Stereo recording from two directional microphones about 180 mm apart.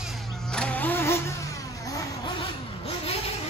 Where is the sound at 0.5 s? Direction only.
5° left (ahead or behind).